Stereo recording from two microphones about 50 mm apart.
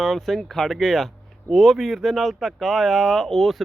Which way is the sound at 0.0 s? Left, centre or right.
Centre.